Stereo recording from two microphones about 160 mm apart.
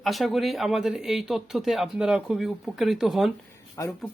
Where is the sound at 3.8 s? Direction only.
20° left (ahead or behind).